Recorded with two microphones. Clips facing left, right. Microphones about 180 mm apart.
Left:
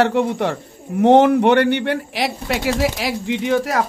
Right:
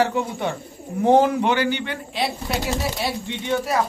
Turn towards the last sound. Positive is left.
turn(degrees=90)